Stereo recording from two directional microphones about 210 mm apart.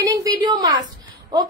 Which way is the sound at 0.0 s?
15° right (ahead or behind).